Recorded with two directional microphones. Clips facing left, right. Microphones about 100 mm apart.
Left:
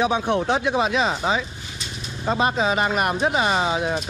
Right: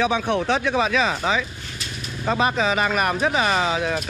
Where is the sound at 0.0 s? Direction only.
20° left (ahead or behind).